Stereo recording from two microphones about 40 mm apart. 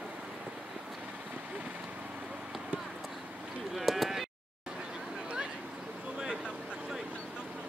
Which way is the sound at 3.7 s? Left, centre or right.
Centre.